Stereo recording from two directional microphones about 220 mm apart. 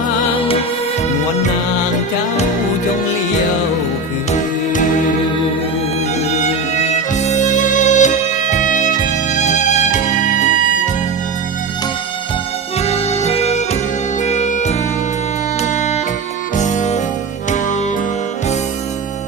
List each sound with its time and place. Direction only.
4.3 s music: 35° left (ahead or behind)
7.2 s music: 30° left (ahead or behind)
12.8 s music: 30° left (ahead or behind)